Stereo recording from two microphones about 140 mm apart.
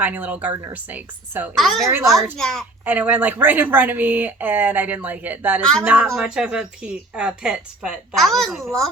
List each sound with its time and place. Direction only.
0.0 s a woman's voice: 10° right (ahead or behind)
2.3 s speech: 5° left (ahead or behind)
2.8 s speech: 10° right (ahead or behind)